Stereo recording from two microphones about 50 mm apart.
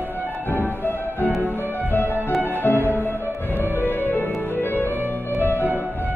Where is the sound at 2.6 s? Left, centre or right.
Left.